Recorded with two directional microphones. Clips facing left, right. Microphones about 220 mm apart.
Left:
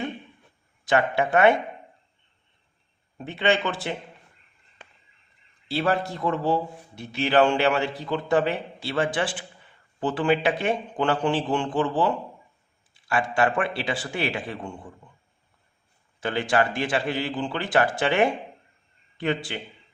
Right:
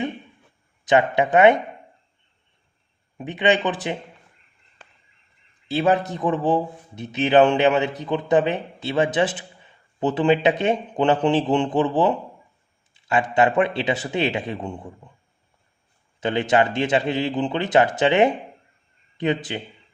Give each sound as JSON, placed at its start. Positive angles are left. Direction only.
{"t": 0.9, "sound": "a man's voice", "side_deg": -20}
{"t": 3.2, "sound": "speech", "side_deg": -15}
{"t": 5.6, "sound": "a man's voice", "side_deg": -20}
{"t": 16.2, "sound": "a man's voice", "side_deg": -20}